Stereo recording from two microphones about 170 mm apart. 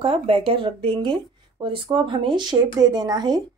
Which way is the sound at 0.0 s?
35° right (ahead or behind).